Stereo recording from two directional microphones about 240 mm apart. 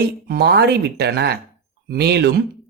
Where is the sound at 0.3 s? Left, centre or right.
Right.